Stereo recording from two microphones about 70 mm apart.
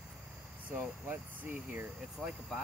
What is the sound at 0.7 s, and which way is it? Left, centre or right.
Speech, right.